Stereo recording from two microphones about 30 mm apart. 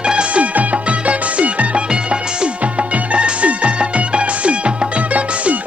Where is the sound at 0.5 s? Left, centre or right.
Right.